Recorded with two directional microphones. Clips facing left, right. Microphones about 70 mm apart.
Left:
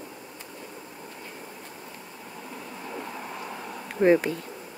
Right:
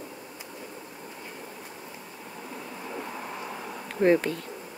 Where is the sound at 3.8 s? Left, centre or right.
Centre.